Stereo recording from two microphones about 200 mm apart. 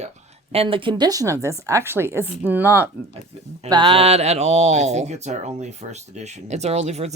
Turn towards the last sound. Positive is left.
turn(degrees=-35)  # may be behind; listen again after turning